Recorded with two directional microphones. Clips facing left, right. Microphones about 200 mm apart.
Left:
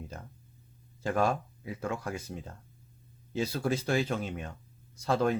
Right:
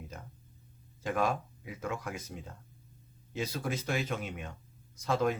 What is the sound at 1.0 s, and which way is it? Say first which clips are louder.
Speech: left 3 dB; 35° left (ahead or behind).